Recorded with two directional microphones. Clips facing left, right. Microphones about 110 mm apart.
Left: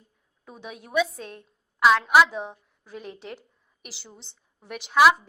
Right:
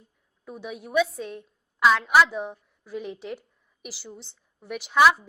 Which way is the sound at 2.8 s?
15° right (ahead or behind).